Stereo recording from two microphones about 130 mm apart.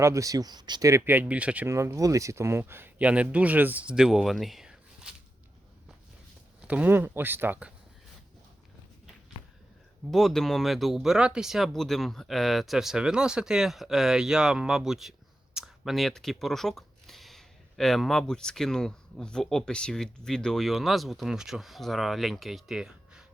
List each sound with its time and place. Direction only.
0.0 s speech: 25° right (ahead or behind)
1.7 s speech: 25° right (ahead or behind); by 5.1 s 5° right (ahead or behind)
6.6 s speech: 10° right (ahead or behind)
10.1 s speech: centre (ahead or behind)